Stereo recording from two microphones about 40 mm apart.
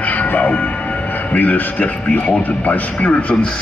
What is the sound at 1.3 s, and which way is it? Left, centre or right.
Speech, left.